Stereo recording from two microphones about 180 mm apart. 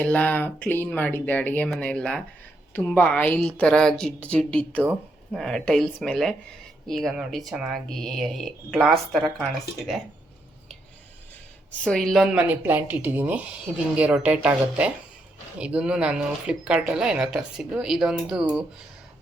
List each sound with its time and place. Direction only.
0.0 s speech: 10° left (ahead or behind)
4.8 s speech: 5° right (ahead or behind)
11.7 s speech: 5° left (ahead or behind)